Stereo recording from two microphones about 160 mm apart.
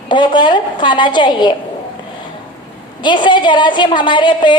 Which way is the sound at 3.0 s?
30° left (ahead or behind).